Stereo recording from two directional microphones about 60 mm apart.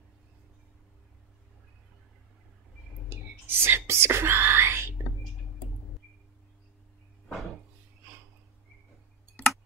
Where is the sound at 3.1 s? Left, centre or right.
Right.